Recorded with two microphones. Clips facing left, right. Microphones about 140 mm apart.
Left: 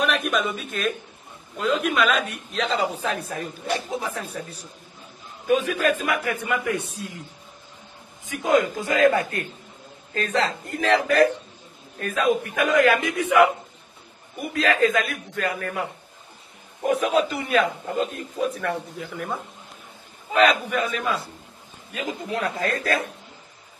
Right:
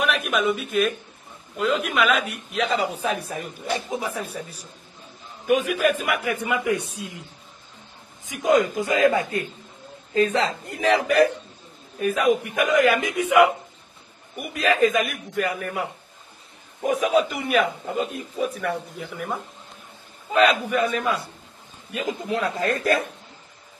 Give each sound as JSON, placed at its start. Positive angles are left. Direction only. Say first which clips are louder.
{"t": 0.0, "sound": "speech", "louder": "right 1 dB", "side_deg": -5}
{"t": 5.7, "sound": "speech", "louder": "right 1 dB", "side_deg": -10}
{"t": 8.3, "sound": "a man's voice", "louder": "right 1 dB", "side_deg": -20}